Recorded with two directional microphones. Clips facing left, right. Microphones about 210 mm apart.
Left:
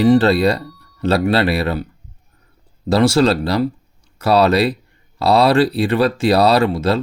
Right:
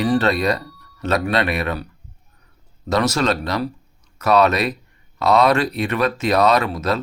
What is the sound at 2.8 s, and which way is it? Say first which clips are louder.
Speech: left 5 dB; 30° left (ahead or behind).